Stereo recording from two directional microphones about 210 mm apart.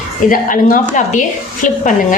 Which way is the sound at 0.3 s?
40° left (ahead or behind).